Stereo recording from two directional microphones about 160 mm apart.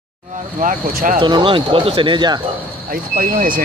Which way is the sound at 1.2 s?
30° right (ahead or behind).